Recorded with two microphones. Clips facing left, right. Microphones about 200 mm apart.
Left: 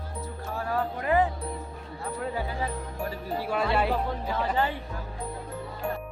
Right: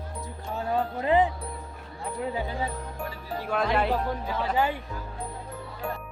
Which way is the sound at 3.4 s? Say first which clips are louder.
Right 1 dB; 10° left (ahead or behind).